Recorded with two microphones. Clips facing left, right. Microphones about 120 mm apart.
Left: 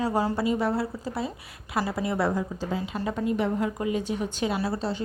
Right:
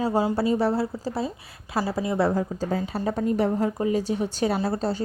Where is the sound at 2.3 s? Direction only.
45° right (ahead or behind).